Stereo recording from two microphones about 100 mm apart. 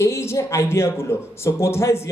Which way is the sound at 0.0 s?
25° left (ahead or behind).